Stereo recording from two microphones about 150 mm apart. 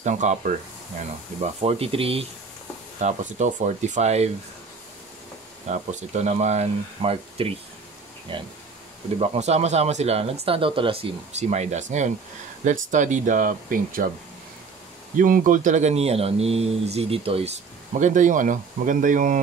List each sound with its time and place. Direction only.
0.0 s speech: 55° right (ahead or behind)
1.4 s speech: 45° right (ahead or behind)
3.0 s speech: 50° right (ahead or behind)
5.7 s speech: 50° right (ahead or behind); by 8.5 s 30° right (ahead or behind)
9.2 s speech: 45° right (ahead or behind); by 14.0 s 70° right (ahead or behind)
15.1 s speech: 65° right (ahead or behind); by 17.5 s 40° right (ahead or behind)
17.9 s speech: 55° right (ahead or behind)